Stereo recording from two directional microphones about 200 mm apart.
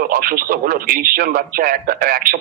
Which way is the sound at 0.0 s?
45° right (ahead or behind).